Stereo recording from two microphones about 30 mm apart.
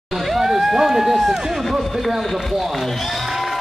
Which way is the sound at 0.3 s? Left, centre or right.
Centre.